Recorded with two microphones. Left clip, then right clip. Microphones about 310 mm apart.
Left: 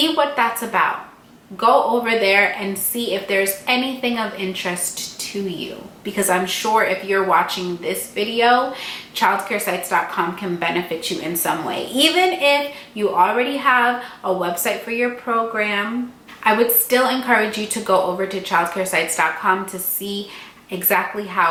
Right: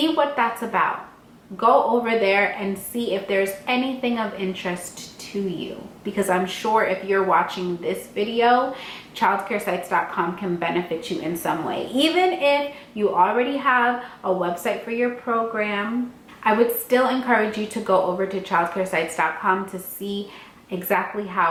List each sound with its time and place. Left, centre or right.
0.0 s speech: centre
1.5 s a man's voice: centre
2.1 s speech: centre